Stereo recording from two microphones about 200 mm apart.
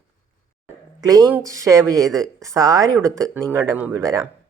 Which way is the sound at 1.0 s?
15° right (ahead or behind).